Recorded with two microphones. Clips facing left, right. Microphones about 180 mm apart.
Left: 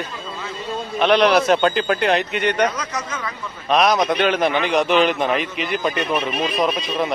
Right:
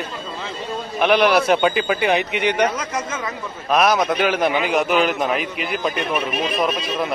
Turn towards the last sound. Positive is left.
turn(degrees=0)  # may be behind; listen again after turning